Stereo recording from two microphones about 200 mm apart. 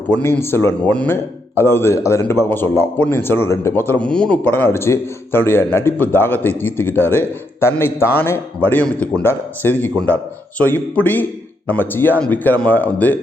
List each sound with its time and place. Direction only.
0.1 s a man's voice: 10° left (ahead or behind)